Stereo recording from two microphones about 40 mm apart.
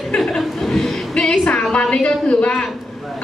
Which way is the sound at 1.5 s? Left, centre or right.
Left.